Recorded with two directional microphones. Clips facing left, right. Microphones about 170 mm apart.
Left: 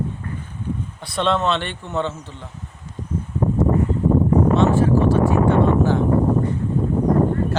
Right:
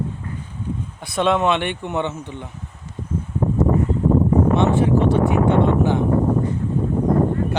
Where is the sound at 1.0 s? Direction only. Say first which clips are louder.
Right 2 dB; 10° right (ahead or behind).